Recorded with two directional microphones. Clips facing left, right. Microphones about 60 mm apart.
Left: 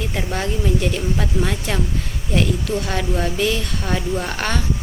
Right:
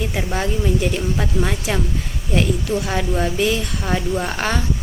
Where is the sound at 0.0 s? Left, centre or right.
Centre.